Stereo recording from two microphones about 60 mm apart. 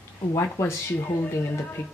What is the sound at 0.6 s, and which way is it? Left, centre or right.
Speech, left.